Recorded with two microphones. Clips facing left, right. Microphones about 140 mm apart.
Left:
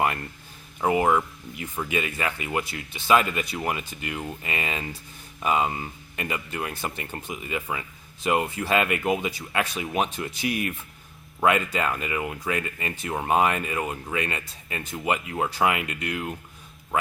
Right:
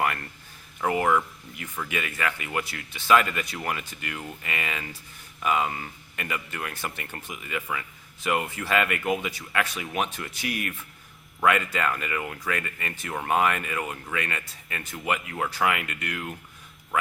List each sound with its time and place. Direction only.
0.8 s speech: 20° left (ahead or behind)